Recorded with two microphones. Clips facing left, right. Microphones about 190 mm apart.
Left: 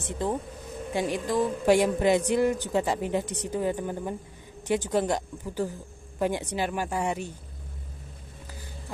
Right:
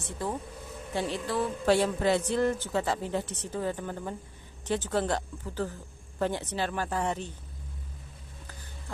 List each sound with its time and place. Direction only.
0.2 s a man's voice: 20° left (ahead or behind)